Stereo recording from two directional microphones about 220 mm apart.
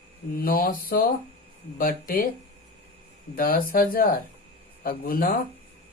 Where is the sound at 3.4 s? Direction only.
40° left (ahead or behind).